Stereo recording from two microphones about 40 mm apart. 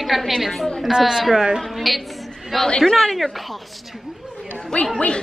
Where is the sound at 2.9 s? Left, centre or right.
Centre.